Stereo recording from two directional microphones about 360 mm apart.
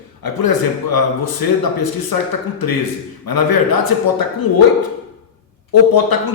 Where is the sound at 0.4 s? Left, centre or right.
Left.